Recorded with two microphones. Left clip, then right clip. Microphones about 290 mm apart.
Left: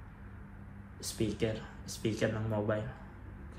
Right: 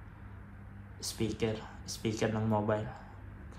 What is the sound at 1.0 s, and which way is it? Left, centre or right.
Speech, centre.